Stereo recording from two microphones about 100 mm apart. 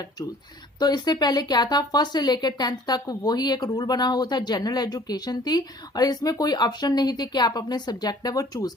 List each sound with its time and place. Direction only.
0.8 s speech: 40° left (ahead or behind)